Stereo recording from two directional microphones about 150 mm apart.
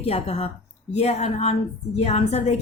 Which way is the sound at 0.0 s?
45° left (ahead or behind).